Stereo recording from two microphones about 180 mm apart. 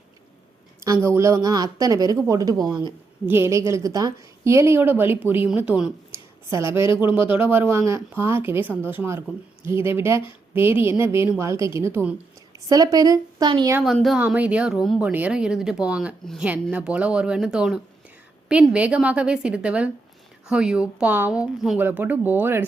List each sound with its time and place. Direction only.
0.9 s a woman's voice: 15° right (ahead or behind)
13.7 s a woman's voice: centre (ahead or behind)